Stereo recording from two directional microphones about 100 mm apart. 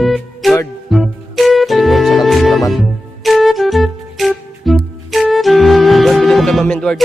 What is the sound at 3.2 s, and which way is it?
Flute, centre (ahead or behind).